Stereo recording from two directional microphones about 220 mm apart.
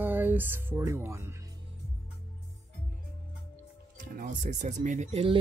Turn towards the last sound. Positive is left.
turn(degrees=-25)  # may be behind; listen again after turning